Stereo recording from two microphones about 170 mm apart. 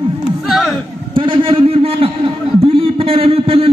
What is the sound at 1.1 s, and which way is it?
A man's voice, 30° right (ahead or behind).